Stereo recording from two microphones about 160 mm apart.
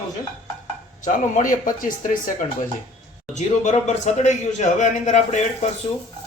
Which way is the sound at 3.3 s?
45° left (ahead or behind).